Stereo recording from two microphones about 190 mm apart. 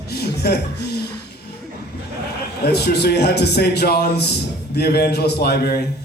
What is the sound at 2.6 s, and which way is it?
A man's voice, 60° left (ahead or behind).